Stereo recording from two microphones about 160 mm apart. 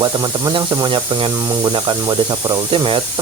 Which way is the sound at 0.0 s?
25° right (ahead or behind).